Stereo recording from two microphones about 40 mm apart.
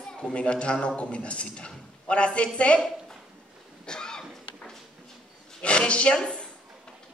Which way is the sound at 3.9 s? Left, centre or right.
Centre.